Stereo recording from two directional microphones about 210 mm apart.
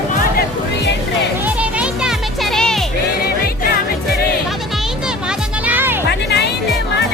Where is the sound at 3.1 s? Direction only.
45° left (ahead or behind).